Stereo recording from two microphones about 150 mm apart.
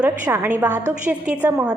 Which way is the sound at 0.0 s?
15° right (ahead or behind).